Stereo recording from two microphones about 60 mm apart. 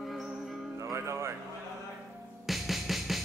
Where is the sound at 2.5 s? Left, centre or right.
Centre.